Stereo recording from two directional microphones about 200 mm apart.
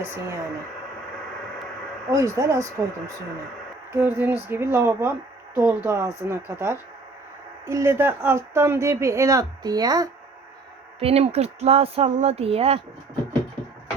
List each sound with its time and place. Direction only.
0.0 s speech: 10° right (ahead or behind)
2.1 s speech: 15° right (ahead or behind)
3.9 s speech: 10° right (ahead or behind)
11.0 s speech: 30° right (ahead or behind)